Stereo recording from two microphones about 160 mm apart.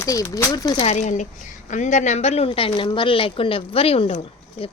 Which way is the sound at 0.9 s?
50° left (ahead or behind).